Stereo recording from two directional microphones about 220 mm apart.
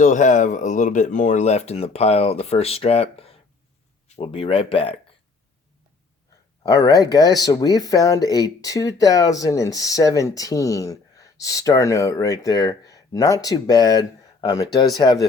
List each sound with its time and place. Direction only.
0.0 s speech: 35° left (ahead or behind)
6.6 s speech: 15° left (ahead or behind)